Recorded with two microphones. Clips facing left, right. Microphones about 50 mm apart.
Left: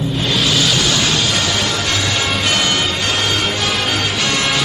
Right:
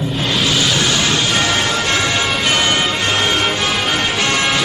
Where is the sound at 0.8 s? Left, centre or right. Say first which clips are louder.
Even; right.